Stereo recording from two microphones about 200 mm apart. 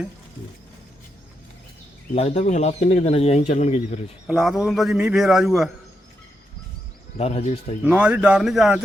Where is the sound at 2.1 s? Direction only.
35° left (ahead or behind).